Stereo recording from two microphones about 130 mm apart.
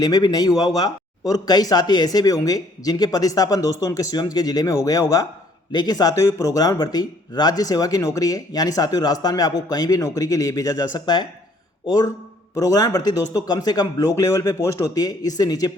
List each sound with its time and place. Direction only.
0.0 s speech: 30° left (ahead or behind)